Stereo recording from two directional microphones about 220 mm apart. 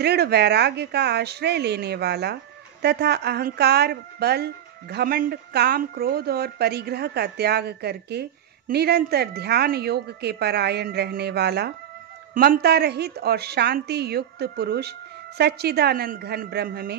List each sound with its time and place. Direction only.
0.0 s a woman's voice: 45° right (ahead or behind)